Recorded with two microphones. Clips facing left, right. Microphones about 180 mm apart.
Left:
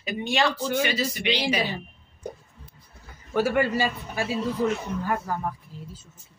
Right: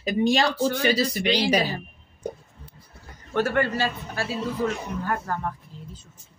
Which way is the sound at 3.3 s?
10° left (ahead or behind).